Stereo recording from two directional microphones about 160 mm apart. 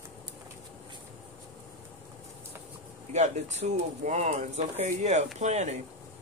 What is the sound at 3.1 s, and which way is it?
Speech, 45° right (ahead or behind).